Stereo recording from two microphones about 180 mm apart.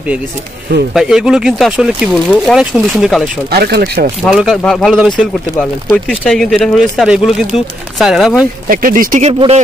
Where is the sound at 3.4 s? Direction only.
60° right (ahead or behind).